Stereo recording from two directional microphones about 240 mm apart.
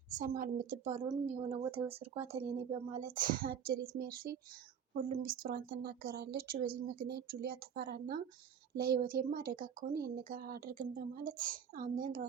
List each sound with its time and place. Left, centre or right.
0.1 s a woman's voice: right